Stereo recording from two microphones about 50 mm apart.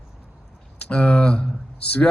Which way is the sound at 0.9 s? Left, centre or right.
Left.